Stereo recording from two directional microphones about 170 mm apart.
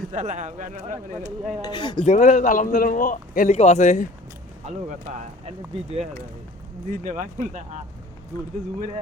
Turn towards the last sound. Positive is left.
turn(degrees=-50)  # may be behind; listen again after turning